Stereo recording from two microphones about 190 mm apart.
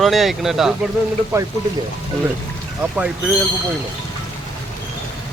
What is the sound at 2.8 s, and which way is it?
Speech, 5° right (ahead or behind).